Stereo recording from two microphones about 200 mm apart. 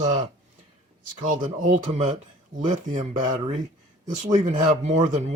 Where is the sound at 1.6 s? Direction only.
35° right (ahead or behind).